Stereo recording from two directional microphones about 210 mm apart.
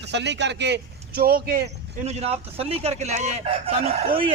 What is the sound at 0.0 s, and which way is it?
A man's voice, 55° right (ahead or behind).